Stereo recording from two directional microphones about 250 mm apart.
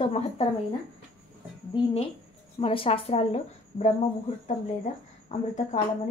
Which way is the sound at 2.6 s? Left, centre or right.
Left.